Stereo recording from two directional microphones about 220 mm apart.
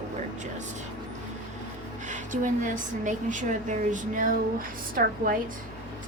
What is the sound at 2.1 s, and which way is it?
A woman's voice, 35° right (ahead or behind).